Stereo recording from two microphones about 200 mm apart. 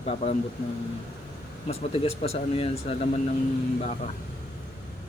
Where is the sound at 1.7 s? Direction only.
30° left (ahead or behind).